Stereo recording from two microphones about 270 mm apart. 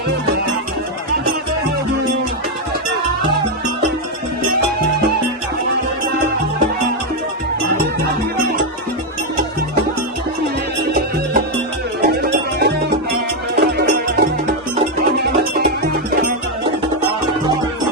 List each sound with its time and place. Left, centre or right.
12.0 s music: right